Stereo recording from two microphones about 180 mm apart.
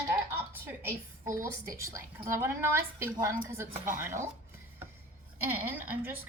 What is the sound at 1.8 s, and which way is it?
Speech, 15° right (ahead or behind).